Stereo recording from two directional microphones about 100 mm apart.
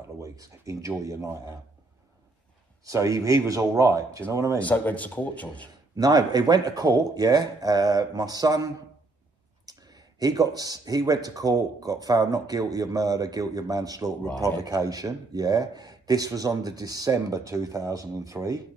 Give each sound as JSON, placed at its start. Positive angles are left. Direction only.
{"t": 0.2, "sound": "speech", "side_deg": -35}
{"t": 2.8, "sound": "speech", "side_deg": -35}
{"t": 4.6, "sound": "speech", "side_deg": 15}
{"t": 5.9, "sound": "speech", "side_deg": -40}